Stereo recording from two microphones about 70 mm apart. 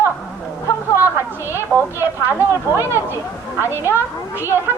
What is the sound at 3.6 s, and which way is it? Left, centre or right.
Speech, left.